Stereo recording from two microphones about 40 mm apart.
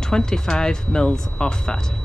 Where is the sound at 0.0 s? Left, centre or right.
Centre.